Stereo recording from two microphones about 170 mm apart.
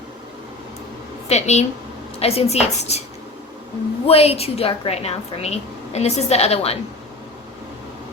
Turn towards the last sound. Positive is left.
turn(degrees=35)  # may be behind; listen again after turning